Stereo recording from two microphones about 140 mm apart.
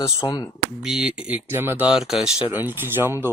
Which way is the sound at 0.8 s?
5° right (ahead or behind).